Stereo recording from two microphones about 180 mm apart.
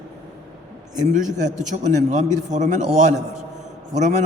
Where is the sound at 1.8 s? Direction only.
45° right (ahead or behind).